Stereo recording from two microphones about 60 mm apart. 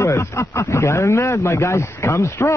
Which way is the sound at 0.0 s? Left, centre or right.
Left.